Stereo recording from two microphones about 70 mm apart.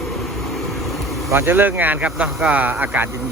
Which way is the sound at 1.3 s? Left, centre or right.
Right.